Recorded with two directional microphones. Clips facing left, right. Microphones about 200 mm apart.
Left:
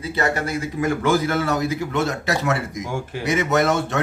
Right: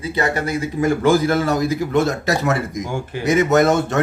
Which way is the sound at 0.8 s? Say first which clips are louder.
Right 4 dB; 35° right (ahead or behind).